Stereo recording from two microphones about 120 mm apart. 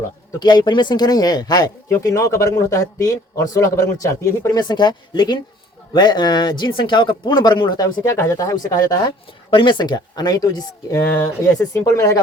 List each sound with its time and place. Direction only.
0.3 s speech: 35° left (ahead or behind)
4.7 s speech: 35° left (ahead or behind)
8.0 s speech: 25° left (ahead or behind)
9.5 s speech: 40° left (ahead or behind)
11.1 s speech: 20° left (ahead or behind)